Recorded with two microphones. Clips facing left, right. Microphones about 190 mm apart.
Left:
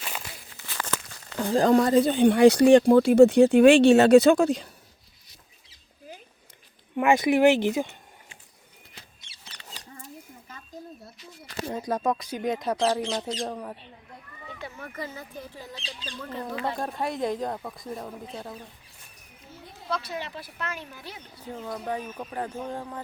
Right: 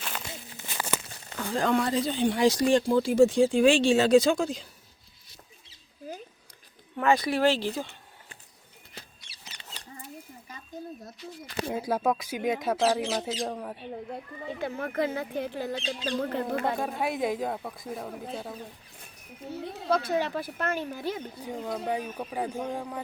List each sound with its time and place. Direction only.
0.5 s crumpling: 20° right (ahead or behind)
0.9 s a sound: 25° right (ahead or behind)
1.4 s speech: 35° left (ahead or behind); by 4.7 s 65° left (ahead or behind)
6.9 s speech: 15° left (ahead or behind)
11.6 s speech: 5° right (ahead or behind)
14.6 s speech: 55° right (ahead or behind)
16.7 s speech: 5° right (ahead or behind)
19.5 s speech: 65° right (ahead or behind)
19.9 s speech: 50° right (ahead or behind)
21.0 s speech: 15° right (ahead or behind)